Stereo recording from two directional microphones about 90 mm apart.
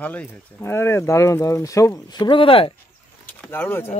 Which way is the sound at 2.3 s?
80° left.